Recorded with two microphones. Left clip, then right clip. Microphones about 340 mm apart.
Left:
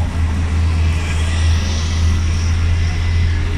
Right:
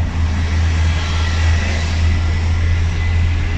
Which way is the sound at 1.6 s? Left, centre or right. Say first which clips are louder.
Right 2 dB; right.